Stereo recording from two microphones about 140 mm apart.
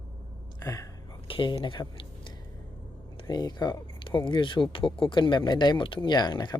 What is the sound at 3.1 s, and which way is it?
Speech, 30° left (ahead or behind).